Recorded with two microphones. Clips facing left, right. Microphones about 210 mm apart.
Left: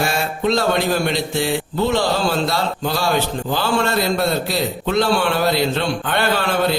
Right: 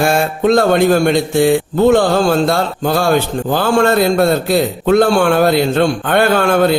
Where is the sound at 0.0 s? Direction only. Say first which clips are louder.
Right 7 dB; 50° right (ahead or behind).